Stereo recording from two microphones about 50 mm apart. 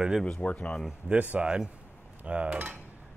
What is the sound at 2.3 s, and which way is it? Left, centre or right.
Cutlery, right.